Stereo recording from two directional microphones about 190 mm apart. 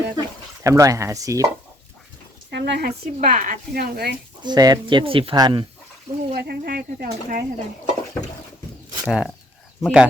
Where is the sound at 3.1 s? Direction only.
40° right (ahead or behind).